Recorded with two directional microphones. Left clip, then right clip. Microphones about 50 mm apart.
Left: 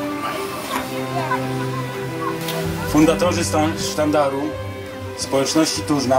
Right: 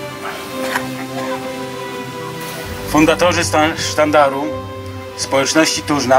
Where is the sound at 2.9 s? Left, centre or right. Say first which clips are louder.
Right 4 dB; right.